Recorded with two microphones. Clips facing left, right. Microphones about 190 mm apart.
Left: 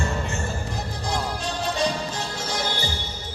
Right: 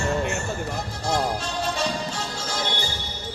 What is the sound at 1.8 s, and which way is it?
Music, 20° left (ahead or behind).